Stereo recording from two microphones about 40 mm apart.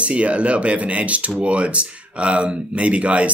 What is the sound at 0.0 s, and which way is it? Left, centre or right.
Speech, right.